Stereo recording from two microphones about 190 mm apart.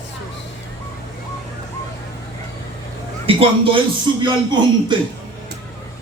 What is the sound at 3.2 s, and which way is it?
A man's voice, 30° right (ahead or behind).